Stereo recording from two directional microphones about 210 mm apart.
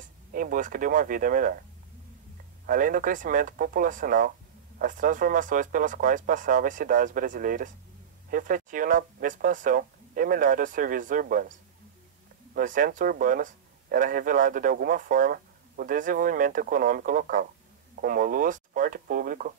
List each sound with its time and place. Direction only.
0.3 s speech: 40° right (ahead or behind)
2.6 s speech: 40° right (ahead or behind)
12.5 s speech: 40° right (ahead or behind)